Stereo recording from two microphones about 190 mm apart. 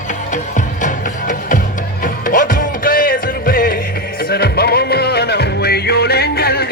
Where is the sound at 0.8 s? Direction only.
40° left (ahead or behind).